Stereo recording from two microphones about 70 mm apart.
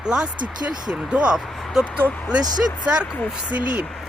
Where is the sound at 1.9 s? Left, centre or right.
Left.